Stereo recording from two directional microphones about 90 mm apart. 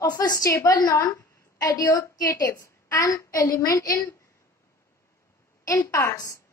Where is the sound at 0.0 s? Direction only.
45° left (ahead or behind).